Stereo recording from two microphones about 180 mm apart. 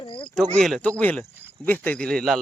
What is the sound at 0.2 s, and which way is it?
Speech, 5° left (ahead or behind).